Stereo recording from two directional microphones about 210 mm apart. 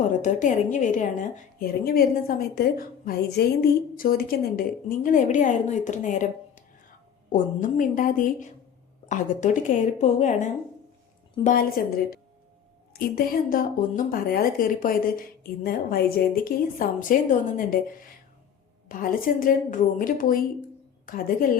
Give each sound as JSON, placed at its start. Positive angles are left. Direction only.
{"t": 0.2, "sound": "a woman's voice", "side_deg": 35}
{"t": 7.3, "sound": "a woman's voice", "side_deg": 40}
{"t": 18.9, "sound": "a woman's voice", "side_deg": 40}